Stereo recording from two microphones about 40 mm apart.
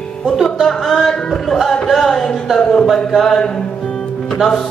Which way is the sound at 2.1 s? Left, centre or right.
Centre.